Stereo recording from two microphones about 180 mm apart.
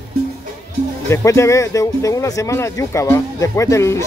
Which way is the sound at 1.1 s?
15° left (ahead or behind).